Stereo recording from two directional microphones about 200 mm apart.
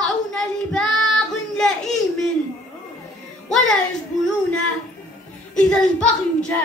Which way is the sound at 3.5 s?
Centre (ahead or behind).